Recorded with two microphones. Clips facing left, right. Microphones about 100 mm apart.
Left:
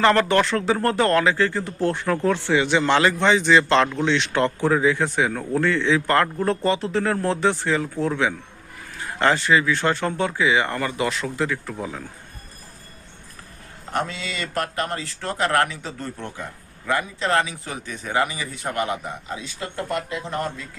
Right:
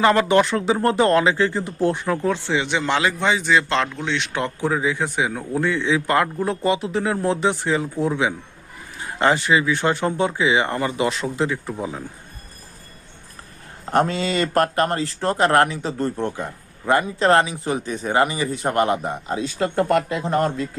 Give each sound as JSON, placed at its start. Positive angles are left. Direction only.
{"t": 0.0, "sound": "a man's voice", "side_deg": -15}
{"t": 13.9, "sound": "speech", "side_deg": -45}
{"t": 17.4, "sound": "speech", "side_deg": -25}
{"t": 18.7, "sound": "speech", "side_deg": -40}
{"t": 20.1, "sound": "speech", "side_deg": -40}